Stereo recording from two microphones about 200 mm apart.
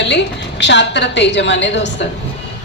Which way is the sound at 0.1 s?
60° left (ahead or behind).